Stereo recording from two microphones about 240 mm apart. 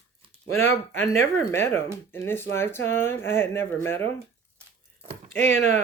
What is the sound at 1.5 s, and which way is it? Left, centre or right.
Speech, centre.